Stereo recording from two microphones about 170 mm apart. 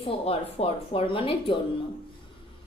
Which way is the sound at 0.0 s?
35° left (ahead or behind).